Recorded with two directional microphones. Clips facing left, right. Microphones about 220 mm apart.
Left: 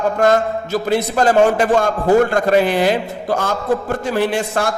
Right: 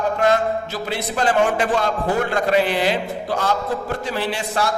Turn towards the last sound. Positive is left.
turn(degrees=50)  # may be behind; listen again after turning